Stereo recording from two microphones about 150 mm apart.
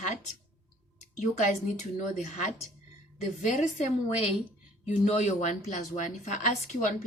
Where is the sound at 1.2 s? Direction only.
55° left (ahead or behind).